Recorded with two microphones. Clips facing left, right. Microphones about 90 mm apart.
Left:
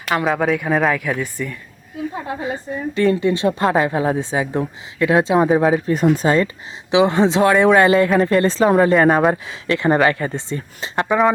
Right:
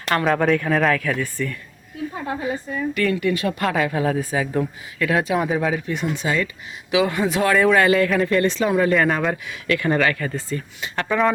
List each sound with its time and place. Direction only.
0.1 s speech: 5° left (ahead or behind)
2.2 s speech: 25° left (ahead or behind)
6.9 s speech: 25° left (ahead or behind)